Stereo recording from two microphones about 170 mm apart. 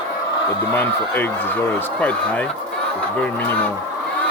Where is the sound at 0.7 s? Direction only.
10° left (ahead or behind).